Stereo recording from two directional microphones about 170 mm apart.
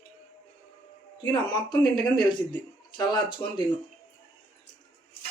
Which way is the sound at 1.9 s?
25° left (ahead or behind).